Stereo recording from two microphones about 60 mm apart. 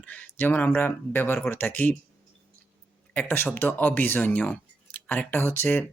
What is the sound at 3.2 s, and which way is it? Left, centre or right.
Speech, left.